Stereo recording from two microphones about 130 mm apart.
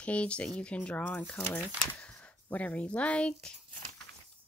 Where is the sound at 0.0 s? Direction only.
10° left (ahead or behind).